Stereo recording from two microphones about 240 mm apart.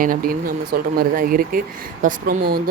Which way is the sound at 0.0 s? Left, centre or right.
Right.